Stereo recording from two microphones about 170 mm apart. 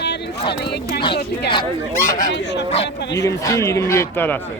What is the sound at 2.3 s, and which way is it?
Speech, 90° left.